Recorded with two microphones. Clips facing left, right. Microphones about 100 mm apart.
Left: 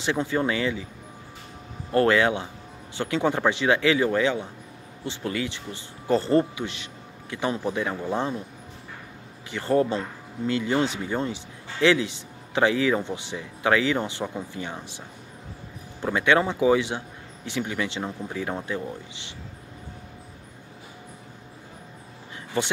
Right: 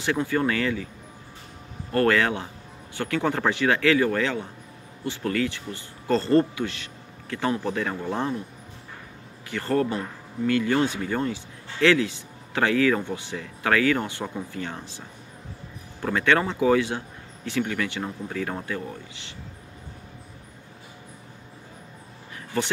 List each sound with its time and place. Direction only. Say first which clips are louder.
0.0 s speech: right 1 dB; 20° left (ahead or behind)
1.9 s speech: left 1 dB; 20° left (ahead or behind)
9.5 s speech: left 2 dB; 20° left (ahead or behind)
16.0 s speech: left 1 dB; 15° left (ahead or behind)